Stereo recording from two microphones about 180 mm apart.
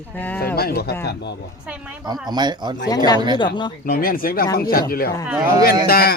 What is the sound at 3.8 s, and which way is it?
Speech, 55° left (ahead or behind).